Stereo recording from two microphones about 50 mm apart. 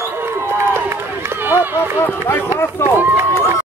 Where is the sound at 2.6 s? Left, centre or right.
Left.